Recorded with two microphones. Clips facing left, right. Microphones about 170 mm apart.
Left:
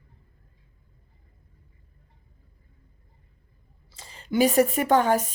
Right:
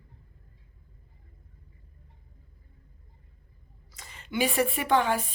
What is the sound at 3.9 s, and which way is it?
Speech, 30° left (ahead or behind).